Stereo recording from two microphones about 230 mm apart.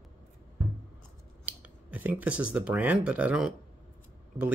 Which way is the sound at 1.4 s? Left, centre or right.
Centre.